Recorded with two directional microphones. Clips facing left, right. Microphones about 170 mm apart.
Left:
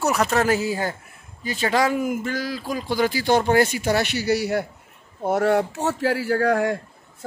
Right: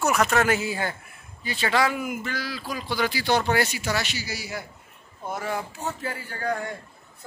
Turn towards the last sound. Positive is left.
turn(degrees=85)